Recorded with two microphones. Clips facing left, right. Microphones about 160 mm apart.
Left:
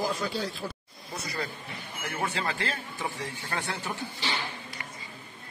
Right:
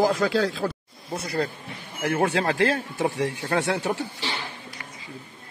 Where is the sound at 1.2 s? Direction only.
60° right (ahead or behind).